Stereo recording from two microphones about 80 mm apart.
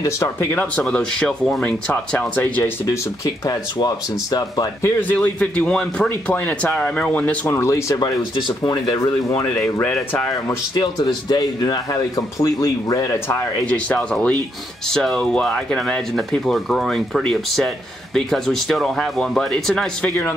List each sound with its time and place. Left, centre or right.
0.0 s speech: left
0.7 s speech: centre
1.9 s speech: left
3.8 s speech: left
5.0 s speech: left
7.4 s speech: left
7.9 s speech: left
10.7 s speech: left
13.7 s speech: centre